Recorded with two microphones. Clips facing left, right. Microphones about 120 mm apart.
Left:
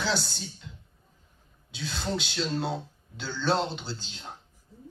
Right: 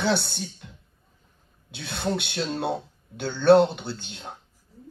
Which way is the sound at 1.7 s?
60° right (ahead or behind).